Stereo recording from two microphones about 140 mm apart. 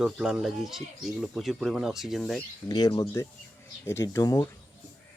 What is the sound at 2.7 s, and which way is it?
Speech, 25° left (ahead or behind).